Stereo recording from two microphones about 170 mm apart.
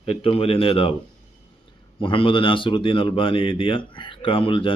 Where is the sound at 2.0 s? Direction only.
30° left (ahead or behind).